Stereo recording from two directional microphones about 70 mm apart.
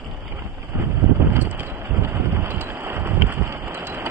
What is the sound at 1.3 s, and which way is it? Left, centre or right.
Boat, right.